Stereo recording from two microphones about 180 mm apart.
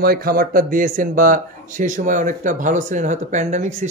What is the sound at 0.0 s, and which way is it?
Speech, 55° right (ahead or behind).